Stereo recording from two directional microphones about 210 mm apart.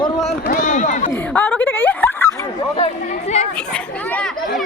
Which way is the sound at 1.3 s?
10° left (ahead or behind).